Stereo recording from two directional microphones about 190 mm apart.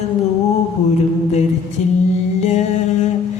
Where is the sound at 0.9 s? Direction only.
35° left (ahead or behind).